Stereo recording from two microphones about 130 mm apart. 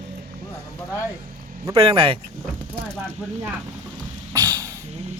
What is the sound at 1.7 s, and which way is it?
Speech, 45° right (ahead or behind).